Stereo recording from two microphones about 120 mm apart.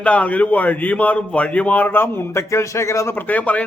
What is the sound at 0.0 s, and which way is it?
A man's voice, 10° left (ahead or behind).